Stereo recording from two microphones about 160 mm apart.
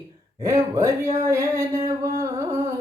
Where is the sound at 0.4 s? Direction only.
20° right (ahead or behind).